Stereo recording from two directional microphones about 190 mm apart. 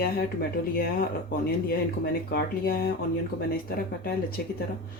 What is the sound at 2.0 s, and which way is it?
Speech, 50° left (ahead or behind).